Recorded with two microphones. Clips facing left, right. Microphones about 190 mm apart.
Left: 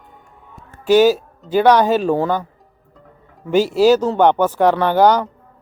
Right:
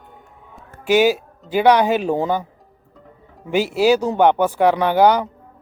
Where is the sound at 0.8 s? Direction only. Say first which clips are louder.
Left 3 dB; 15° right (ahead or behind).